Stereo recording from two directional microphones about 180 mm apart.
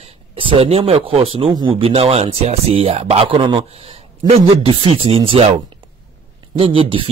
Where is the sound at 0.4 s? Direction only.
30° right (ahead or behind).